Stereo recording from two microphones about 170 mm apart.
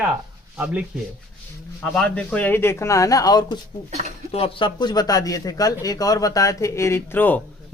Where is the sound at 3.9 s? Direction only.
40° right (ahead or behind).